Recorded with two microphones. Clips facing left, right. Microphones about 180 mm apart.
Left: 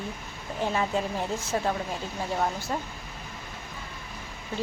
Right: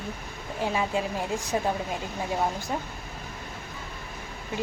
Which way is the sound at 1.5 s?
15° right (ahead or behind).